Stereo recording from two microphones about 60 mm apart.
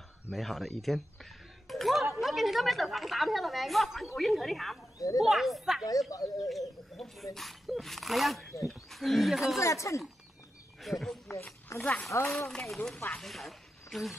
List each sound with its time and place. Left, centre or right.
0.3 s a woman's voice: centre
1.7 s a sound: centre
2.1 s a woman's voice: centre
4.9 s speech: left
5.3 s a woman's voice: centre
6.0 s speech: left
6.9 s snake: centre
7.3 s a woman's voice: centre
9.6 s speech: left
10.8 s speech: centre
11.8 s a woman's voice: left
12.3 s a woman's voice: centre